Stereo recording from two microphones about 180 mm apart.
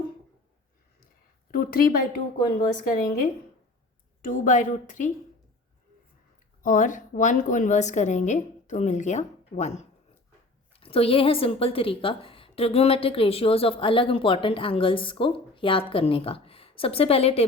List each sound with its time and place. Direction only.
1.5 s a woman's voice: 55° left (ahead or behind)
4.2 s a woman's voice: 45° left (ahead or behind)
6.6 s a woman's voice: 50° left (ahead or behind)